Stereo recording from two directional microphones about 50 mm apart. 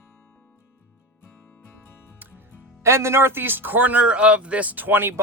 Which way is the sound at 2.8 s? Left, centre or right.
Right.